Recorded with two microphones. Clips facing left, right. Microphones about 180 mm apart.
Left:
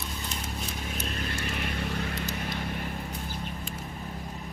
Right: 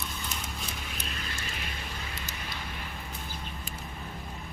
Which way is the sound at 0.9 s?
50° left (ahead or behind).